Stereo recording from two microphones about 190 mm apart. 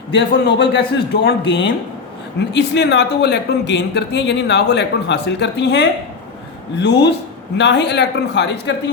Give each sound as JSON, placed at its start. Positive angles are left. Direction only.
{"t": 0.1, "sound": "speech", "side_deg": 70}